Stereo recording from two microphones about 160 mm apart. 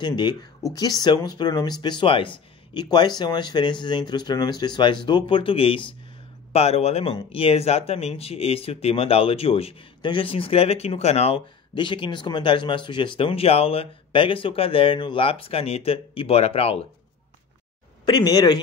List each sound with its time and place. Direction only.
0.0 s speech: 25° left (ahead or behind)
18.0 s speech: 25° left (ahead or behind)